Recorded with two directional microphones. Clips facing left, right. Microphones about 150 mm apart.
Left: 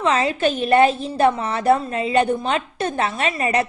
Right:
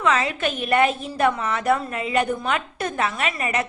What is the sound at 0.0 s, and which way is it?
A woman's voice, 30° left (ahead or behind).